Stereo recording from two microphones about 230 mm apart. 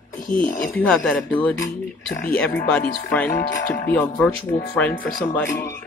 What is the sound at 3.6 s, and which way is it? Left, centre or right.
Speech, left.